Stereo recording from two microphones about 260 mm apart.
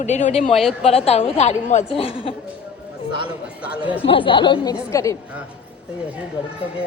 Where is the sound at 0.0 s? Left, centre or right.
Left.